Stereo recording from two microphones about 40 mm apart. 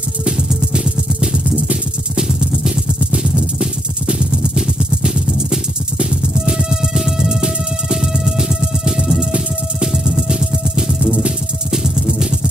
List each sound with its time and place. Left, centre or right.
2.1 s music: centre
3.1 s a sound: right
10.0 s music: centre
11.7 s music: centre